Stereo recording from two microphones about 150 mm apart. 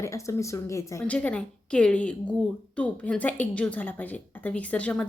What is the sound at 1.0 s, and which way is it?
Speech, 10° left (ahead or behind).